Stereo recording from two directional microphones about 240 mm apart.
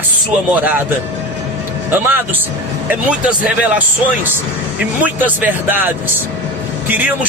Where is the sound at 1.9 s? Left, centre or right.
Centre.